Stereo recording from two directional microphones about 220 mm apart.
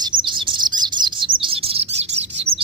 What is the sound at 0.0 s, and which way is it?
Chirp, 20° right (ahead or behind).